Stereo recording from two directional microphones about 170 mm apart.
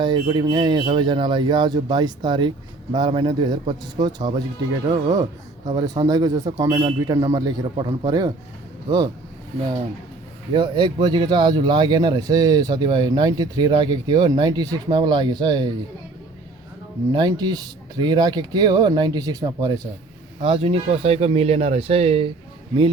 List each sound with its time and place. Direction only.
0.0 s speech: 25° right (ahead or behind)
10.5 s speech: 25° right (ahead or behind)
17.1 s speech: 25° right (ahead or behind)